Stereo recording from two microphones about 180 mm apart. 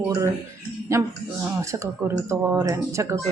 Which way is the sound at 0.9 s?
15° right (ahead or behind).